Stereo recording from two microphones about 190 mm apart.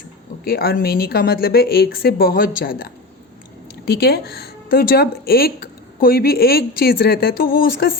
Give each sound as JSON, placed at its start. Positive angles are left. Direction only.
{"t": 0.4, "sound": "speech", "side_deg": 55}